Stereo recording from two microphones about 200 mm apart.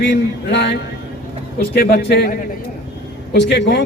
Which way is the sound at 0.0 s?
65° left (ahead or behind).